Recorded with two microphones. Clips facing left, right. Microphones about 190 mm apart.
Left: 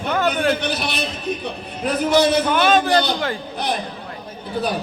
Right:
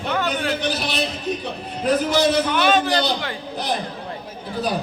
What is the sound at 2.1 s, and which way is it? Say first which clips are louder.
A man's voice: left 2 dB; 55° left (ahead or behind).